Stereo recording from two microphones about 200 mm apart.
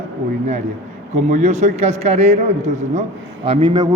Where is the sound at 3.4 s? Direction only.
25° right (ahead or behind).